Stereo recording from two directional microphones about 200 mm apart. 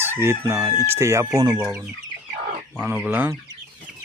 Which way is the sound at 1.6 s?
5° right (ahead or behind).